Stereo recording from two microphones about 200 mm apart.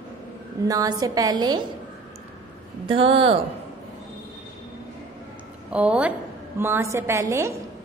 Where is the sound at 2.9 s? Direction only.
25° right (ahead or behind).